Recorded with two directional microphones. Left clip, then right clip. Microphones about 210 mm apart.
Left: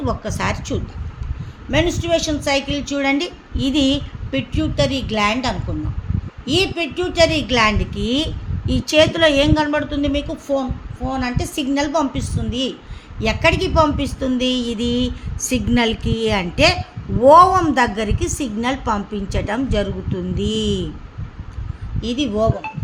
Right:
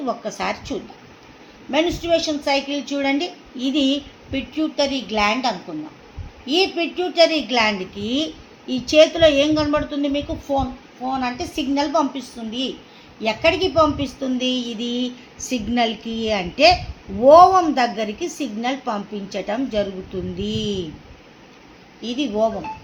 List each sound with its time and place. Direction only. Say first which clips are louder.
0.0 s a woman's voice: left 2 dB; 55° left (ahead or behind)
22.0 s a woman's voice: left 1 dB; 50° left (ahead or behind)